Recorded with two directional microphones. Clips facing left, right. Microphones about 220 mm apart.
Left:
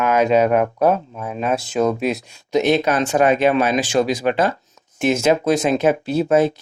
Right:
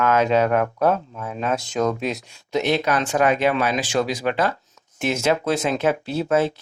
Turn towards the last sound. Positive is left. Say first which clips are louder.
# left 4 dB
turn(degrees=15)  # may be behind; listen again after turning